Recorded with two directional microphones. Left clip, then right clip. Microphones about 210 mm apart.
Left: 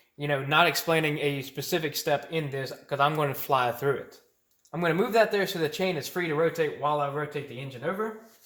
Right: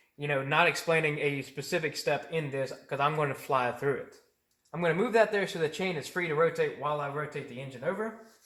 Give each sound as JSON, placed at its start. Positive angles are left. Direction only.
{"t": 0.2, "sound": "speech", "side_deg": 45}